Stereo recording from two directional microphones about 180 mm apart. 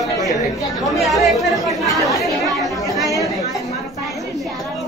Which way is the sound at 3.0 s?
20° right (ahead or behind).